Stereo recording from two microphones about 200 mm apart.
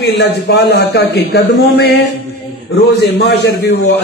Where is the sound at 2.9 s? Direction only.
55° left (ahead or behind).